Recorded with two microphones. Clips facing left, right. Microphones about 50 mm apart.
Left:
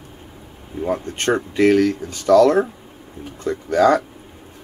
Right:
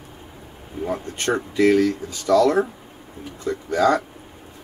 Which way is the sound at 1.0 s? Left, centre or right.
Left.